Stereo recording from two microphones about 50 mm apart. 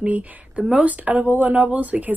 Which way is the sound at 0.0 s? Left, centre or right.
Right.